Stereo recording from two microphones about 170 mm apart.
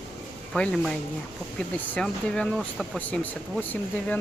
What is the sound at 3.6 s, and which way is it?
Speech, 10° left (ahead or behind).